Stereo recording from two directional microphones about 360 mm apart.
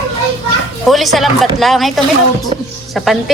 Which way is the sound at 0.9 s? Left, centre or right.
Centre.